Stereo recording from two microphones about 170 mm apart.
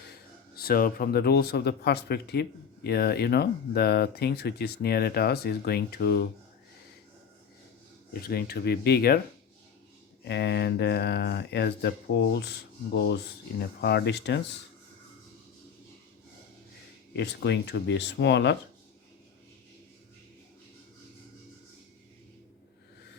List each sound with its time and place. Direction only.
0.5 s speech: 60° left (ahead or behind)
8.2 s speech: 65° left (ahead or behind)
10.2 s speech: 80° left
12.9 s speech: 70° left (ahead or behind); by 14.4 s 90° left
17.2 s speech: 90° left